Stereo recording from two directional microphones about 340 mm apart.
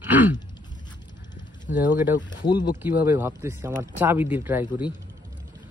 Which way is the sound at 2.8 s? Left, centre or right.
Centre.